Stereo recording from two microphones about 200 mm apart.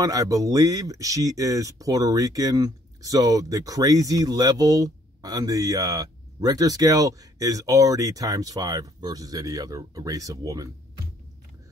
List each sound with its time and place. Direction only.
0.0 s speech: 15° right (ahead or behind)